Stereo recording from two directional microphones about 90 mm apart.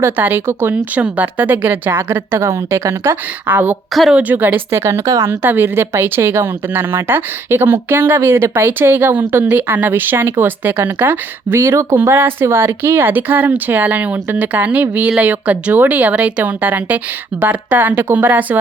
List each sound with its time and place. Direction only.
0.0 s speech: 25° right (ahead or behind)
5.3 s speech: 25° right (ahead or behind)